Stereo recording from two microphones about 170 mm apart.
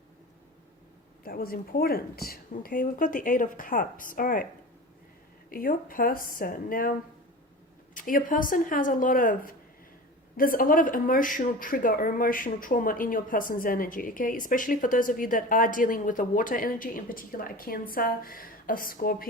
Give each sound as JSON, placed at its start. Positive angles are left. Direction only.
{"t": 1.2, "sound": "a woman's voice", "side_deg": 60}
{"t": 5.5, "sound": "speech", "side_deg": 55}
{"t": 7.9, "sound": "a woman's voice", "side_deg": 55}